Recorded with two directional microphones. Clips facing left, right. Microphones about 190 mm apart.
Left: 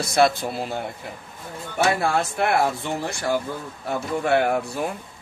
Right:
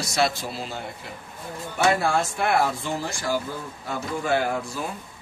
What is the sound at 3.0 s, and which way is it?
A man's voice, 60° left (ahead or behind).